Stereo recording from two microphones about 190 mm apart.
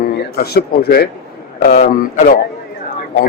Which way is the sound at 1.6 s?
45° left (ahead or behind).